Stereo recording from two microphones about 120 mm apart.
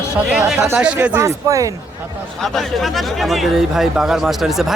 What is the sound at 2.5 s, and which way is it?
Speech, centre (ahead or behind).